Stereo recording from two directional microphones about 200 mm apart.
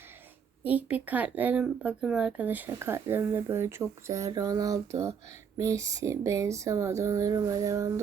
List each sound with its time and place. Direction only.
0.6 s speech: 10° right (ahead or behind)